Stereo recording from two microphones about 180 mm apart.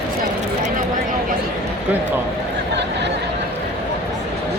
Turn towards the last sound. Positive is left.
turn(degrees=-75)  # may be behind; listen again after turning